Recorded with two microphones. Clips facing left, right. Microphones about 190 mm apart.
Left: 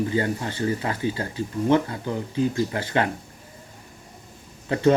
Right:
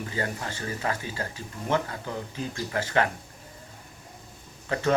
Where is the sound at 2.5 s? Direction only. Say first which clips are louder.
Left 3 dB; 25° left (ahead or behind).